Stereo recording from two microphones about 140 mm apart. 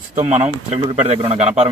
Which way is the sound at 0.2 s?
50° right (ahead or behind).